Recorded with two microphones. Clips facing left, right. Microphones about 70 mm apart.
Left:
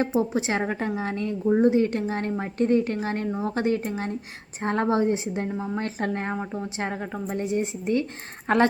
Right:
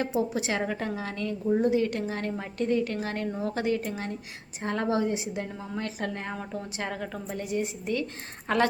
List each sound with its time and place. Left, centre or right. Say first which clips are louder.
0.2 s a woman's voice: left 3 dB; left
6.3 s a woman's voice: left 5 dB; left